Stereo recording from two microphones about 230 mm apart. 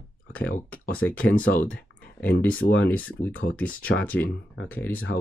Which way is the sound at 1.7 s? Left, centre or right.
Centre.